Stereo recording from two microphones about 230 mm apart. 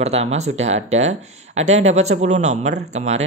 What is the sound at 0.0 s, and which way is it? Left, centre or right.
Speech, right.